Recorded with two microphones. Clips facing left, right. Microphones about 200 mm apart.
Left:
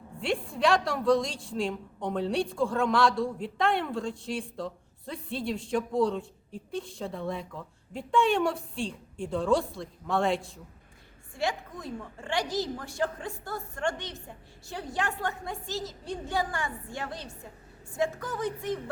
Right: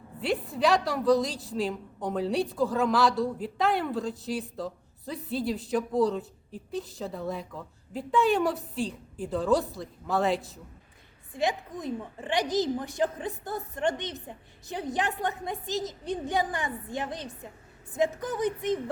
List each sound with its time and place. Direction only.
0.2 s a woman's voice: 5° right (ahead or behind)
11.3 s a woman's voice: 20° right (ahead or behind)